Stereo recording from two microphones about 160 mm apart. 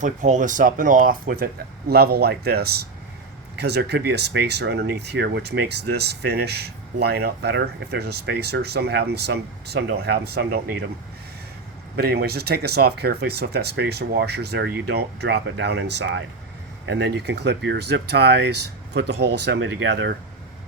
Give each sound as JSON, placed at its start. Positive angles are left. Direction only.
{"t": 0.0, "sound": "speech", "side_deg": -50}
{"t": 3.6, "sound": "speech", "side_deg": -90}
{"t": 11.9, "sound": "speech", "side_deg": -80}